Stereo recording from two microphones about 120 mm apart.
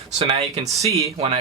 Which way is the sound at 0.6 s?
30° right (ahead or behind).